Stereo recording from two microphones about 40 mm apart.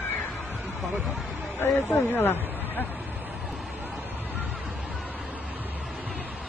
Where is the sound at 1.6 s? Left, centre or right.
Left.